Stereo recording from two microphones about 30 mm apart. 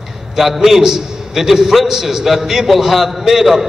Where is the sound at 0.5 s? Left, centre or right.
Centre.